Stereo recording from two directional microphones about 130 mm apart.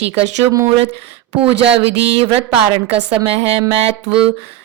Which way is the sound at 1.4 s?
50° right (ahead or behind).